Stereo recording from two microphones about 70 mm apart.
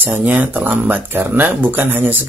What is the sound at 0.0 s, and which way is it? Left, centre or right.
Speech, right.